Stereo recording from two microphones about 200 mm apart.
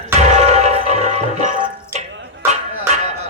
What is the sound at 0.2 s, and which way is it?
Music, 35° right (ahead or behind).